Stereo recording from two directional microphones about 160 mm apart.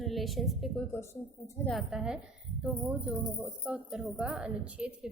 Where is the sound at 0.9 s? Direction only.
15° left (ahead or behind).